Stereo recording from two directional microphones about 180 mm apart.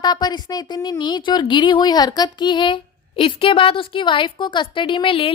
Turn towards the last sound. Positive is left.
turn(degrees=30)  # may be behind; listen again after turning